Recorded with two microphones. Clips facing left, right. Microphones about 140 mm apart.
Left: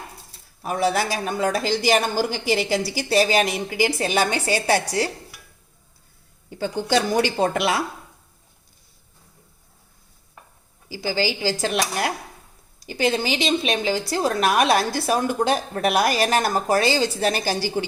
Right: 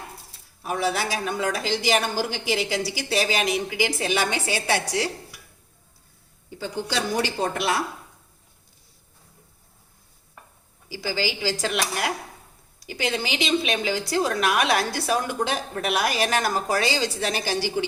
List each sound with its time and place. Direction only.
0.6 s a woman's voice: 45° left (ahead or behind)
7.3 s speech: 90° left
10.8 s a woman's voice: 25° left (ahead or behind)
17.2 s a woman's voice: 40° left (ahead or behind)